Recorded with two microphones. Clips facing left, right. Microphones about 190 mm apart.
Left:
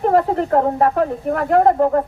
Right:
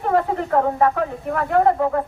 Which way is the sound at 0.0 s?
35° left (ahead or behind).